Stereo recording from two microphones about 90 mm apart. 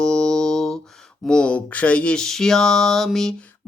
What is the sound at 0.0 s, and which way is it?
Mantra, 5° left (ahead or behind).